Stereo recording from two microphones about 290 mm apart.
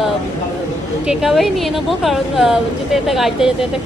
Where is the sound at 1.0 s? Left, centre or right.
Centre.